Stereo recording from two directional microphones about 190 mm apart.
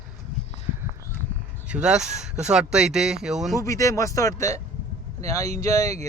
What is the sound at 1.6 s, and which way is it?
A man's voice, 5° right (ahead or behind).